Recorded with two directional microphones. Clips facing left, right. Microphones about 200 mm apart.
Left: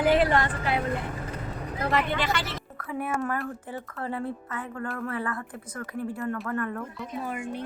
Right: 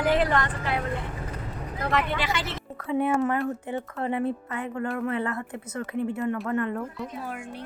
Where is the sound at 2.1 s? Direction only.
10° right (ahead or behind).